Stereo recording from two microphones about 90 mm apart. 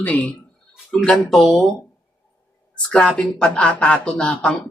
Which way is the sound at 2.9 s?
10° left (ahead or behind).